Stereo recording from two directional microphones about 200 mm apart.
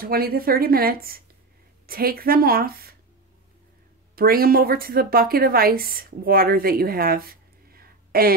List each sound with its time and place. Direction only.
0.0 s speech: 50° right (ahead or behind)
4.1 s speech: 50° right (ahead or behind)